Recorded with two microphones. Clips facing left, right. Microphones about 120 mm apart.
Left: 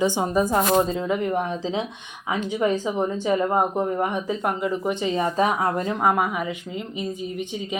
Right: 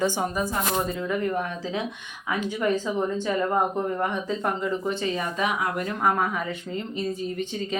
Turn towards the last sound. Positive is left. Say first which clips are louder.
# even
turn(degrees=15)  # may be behind; listen again after turning